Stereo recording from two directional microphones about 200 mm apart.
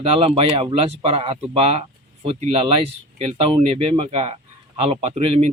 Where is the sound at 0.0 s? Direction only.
30° right (ahead or behind).